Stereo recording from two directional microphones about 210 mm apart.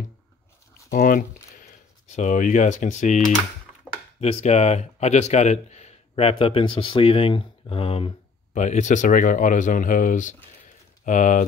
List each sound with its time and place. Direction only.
0.9 s speech: 40° left (ahead or behind)
4.2 s speech: 30° left (ahead or behind)